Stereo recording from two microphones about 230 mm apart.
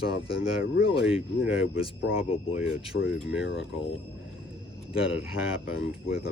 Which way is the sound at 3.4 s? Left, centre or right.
Left.